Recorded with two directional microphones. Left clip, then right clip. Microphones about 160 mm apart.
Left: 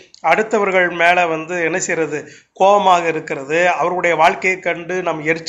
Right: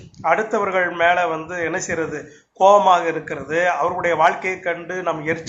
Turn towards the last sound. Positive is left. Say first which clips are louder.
# left 4 dB
turn(degrees=40)  # may be behind; listen again after turning